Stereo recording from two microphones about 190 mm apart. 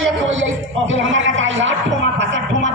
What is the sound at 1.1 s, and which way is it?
Speech, 85° right.